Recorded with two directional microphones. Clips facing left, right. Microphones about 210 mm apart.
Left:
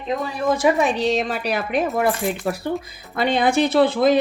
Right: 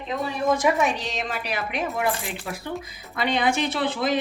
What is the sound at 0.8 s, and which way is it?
Speech, 30° left (ahead or behind).